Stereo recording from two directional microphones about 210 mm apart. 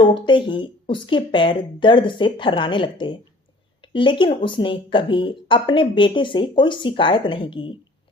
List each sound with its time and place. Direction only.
0.0 s speech: 25° left (ahead or behind)